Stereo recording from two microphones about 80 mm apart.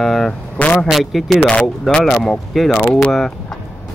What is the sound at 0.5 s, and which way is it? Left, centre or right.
Speech, centre.